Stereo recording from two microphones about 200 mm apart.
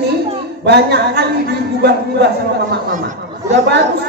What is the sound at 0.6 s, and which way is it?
A woman's voice, 55° right (ahead or behind).